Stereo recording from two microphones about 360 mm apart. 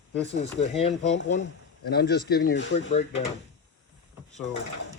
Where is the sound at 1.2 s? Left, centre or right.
Left.